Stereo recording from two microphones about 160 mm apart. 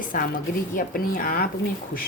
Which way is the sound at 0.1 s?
60° left (ahead or behind).